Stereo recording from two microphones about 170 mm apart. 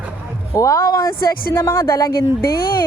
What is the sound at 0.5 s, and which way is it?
Speech, 20° left (ahead or behind).